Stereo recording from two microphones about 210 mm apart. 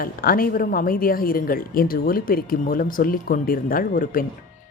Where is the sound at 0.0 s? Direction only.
45° left (ahead or behind).